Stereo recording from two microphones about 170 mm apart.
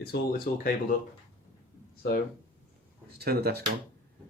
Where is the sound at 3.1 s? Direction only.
65° right (ahead or behind).